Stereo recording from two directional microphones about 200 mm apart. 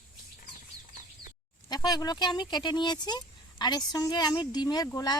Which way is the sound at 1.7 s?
20° left (ahead or behind).